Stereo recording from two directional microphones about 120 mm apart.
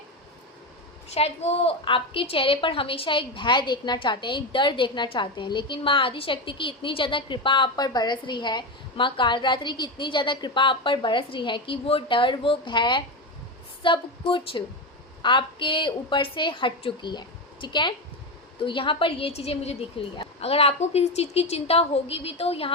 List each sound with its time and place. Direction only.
1.1 s a woman's voice: 60° left (ahead or behind)
1.8 s a woman's voice: 45° left (ahead or behind)